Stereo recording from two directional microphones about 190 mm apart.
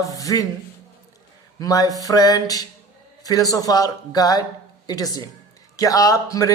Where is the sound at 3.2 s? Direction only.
20° left (ahead or behind).